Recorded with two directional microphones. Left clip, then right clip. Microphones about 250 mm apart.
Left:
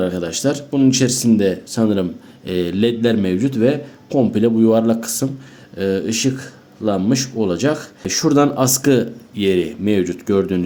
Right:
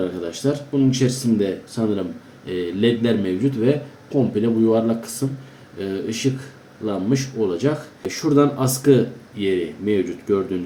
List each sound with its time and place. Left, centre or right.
0.0 s speech: left